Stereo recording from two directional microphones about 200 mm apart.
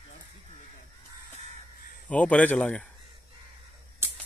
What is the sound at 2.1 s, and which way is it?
Speech, 5° left (ahead or behind).